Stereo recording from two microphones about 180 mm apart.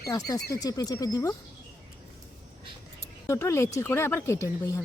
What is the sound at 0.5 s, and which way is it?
Speech, 20° left (ahead or behind).